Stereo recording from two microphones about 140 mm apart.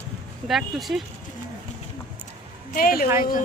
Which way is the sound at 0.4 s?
Centre (ahead or behind).